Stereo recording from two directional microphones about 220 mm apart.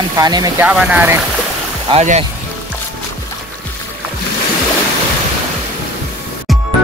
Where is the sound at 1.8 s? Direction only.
30° right (ahead or behind).